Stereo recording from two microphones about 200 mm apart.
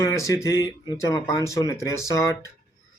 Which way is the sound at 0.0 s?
15° left (ahead or behind).